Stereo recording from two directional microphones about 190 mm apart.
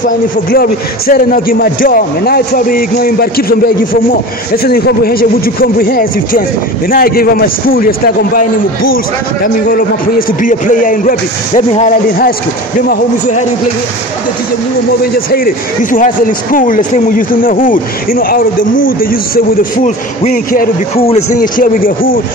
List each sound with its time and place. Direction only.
0.0 s speech: 50° left (ahead or behind)
15.1 s speech: 50° left (ahead or behind)
20.9 s speech: 30° left (ahead or behind)
21.4 s speech: 45° left (ahead or behind)